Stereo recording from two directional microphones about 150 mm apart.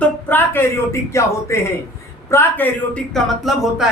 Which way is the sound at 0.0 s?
15° left (ahead or behind).